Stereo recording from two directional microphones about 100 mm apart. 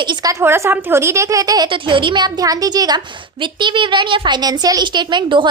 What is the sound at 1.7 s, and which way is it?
A woman's voice, 55° right (ahead or behind).